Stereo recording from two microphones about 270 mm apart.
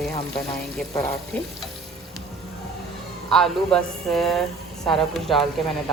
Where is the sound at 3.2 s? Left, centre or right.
Centre.